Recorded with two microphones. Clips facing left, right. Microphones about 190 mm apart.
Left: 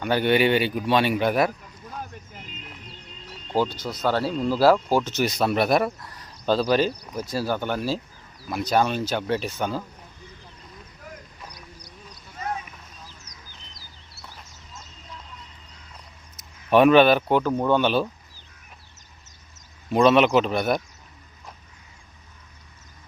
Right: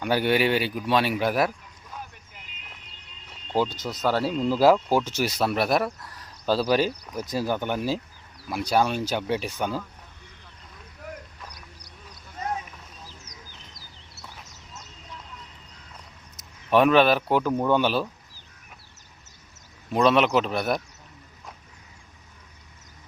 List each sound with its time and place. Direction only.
0.0 s a man's voice: 5° right (ahead or behind)
3.8 s speech: 10° right (ahead or behind)
13.3 s bird: 20° right (ahead or behind)
16.6 s a man's voice: centre (ahead or behind)
19.9 s a man's voice: centre (ahead or behind)